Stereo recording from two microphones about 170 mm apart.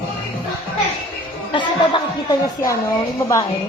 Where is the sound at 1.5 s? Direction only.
30° left (ahead or behind).